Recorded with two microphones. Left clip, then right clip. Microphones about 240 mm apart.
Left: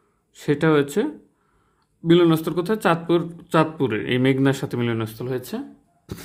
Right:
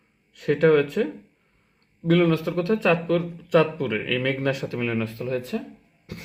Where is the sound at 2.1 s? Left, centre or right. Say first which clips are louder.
Left 3 dB; left.